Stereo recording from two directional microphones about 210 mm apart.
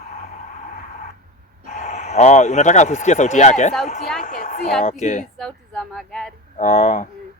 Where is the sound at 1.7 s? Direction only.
35° left (ahead or behind).